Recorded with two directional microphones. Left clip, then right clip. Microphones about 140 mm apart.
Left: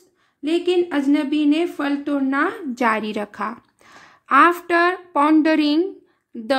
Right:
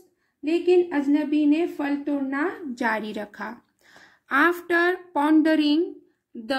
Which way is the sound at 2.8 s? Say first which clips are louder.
Left 6 dB; 35° left (ahead or behind).